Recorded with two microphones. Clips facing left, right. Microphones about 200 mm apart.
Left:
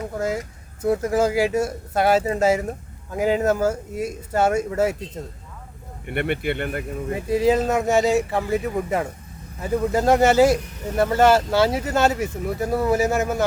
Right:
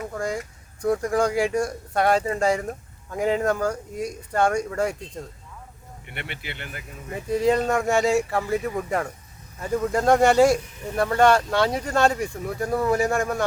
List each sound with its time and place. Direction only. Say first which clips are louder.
0.2 s speech: left 4 dB; 5° left (ahead or behind)
6.1 s speech: left 13 dB; 55° left (ahead or behind)
7.3 s speech: left 2 dB; 5° left (ahead or behind)